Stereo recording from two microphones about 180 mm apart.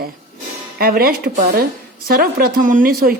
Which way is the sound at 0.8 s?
55° right (ahead or behind).